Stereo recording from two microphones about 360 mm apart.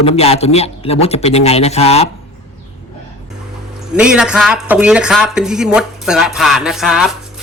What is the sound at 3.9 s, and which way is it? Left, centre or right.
Speech, centre.